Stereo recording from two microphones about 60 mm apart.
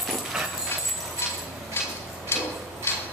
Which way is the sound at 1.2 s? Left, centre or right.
Left.